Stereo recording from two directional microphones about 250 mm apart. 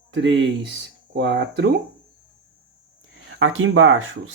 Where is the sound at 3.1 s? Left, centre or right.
Right.